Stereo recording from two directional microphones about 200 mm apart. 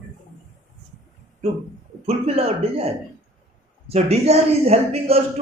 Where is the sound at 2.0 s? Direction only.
30° right (ahead or behind).